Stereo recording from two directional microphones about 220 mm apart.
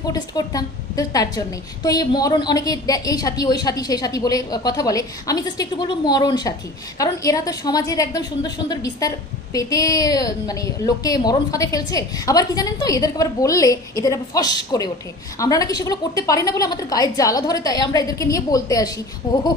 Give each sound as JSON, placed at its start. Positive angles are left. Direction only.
{"t": 0.0, "sound": "a woman's voice", "side_deg": 15}